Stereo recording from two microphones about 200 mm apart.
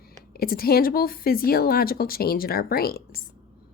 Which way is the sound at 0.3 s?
50° left (ahead or behind).